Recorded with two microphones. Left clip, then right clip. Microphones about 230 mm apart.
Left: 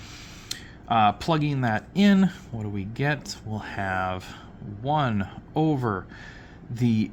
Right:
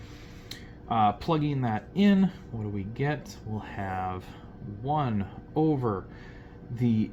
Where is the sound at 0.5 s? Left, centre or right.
Left.